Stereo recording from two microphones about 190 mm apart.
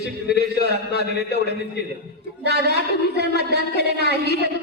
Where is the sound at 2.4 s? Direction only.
60° right (ahead or behind).